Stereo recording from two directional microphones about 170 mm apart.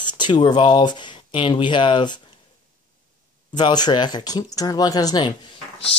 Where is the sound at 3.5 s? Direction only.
25° left (ahead or behind).